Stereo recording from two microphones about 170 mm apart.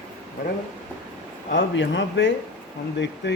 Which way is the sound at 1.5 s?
90° left.